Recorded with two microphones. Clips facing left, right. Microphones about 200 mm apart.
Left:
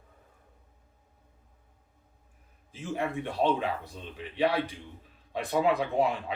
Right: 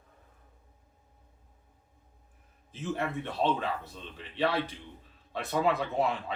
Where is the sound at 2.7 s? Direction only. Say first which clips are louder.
Left 1 dB; 10° left (ahead or behind).